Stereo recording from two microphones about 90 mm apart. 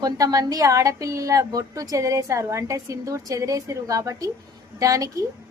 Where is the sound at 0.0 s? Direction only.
40° right (ahead or behind).